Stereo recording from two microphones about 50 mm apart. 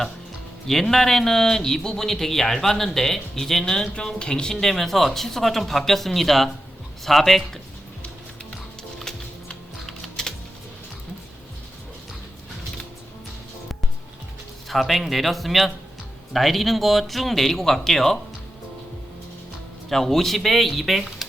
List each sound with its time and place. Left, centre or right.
0.7 s a man's voice: centre
4.5 s speech: centre
9.0 s typing: centre
14.7 s speech: centre
19.9 s speech: centre